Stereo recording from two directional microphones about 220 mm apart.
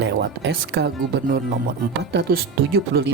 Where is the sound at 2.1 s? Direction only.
45° right (ahead or behind).